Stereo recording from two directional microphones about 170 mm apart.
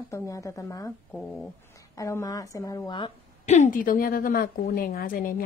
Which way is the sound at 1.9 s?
20° left (ahead or behind).